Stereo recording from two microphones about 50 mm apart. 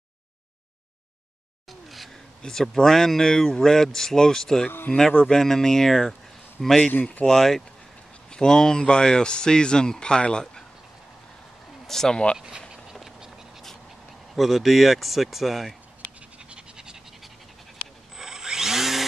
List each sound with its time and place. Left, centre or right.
1.7 s a sound: centre
2.4 s speech: centre
6.9 s speech: left
7.2 s speech: centre
11.9 s speech: centre
12.4 s speech: centre
14.3 s speech: centre
16.4 s a sound: centre
18.1 s tools: centre